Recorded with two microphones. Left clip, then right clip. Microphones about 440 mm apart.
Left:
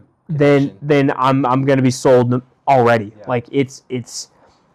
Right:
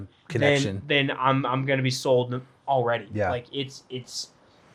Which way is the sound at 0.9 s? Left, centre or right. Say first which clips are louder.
Left 8 dB; left.